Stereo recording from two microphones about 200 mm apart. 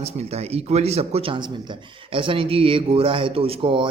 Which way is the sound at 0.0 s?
30° right (ahead or behind).